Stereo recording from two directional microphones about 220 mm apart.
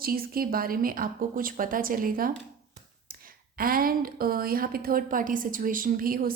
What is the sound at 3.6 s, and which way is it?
Speech, 40° right (ahead or behind).